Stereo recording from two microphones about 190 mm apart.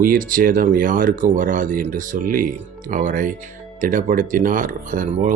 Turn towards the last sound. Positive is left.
turn(degrees=-45)  # may be behind; listen again after turning